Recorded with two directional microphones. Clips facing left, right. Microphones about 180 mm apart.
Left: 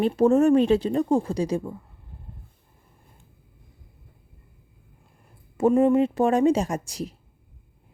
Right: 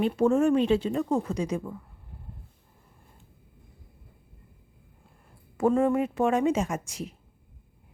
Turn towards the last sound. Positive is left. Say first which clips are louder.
# left 3 dB
turn(degrees=35)  # may be behind; listen again after turning